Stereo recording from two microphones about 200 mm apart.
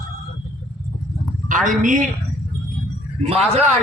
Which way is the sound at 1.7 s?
40° right (ahead or behind).